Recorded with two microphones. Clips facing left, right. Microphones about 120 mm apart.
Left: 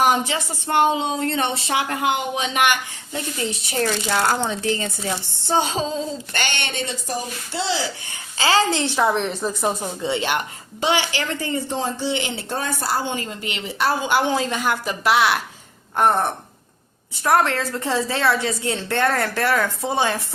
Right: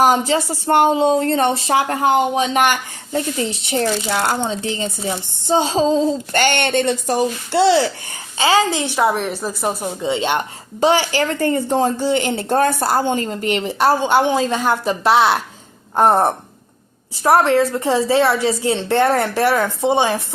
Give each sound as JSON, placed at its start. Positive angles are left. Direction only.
{"t": 0.0, "sound": "speech", "side_deg": -40}
{"t": 5.7, "sound": "speech", "side_deg": -35}
{"t": 8.4, "sound": "a woman's voice", "side_deg": -20}
{"t": 9.8, "sound": "speech", "side_deg": -20}
{"t": 10.8, "sound": "speech", "side_deg": -40}
{"t": 14.1, "sound": "speech", "side_deg": -25}
{"t": 17.2, "sound": "speech", "side_deg": -25}